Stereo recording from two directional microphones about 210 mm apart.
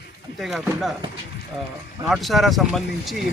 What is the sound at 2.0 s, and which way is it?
Speech, centre (ahead or behind).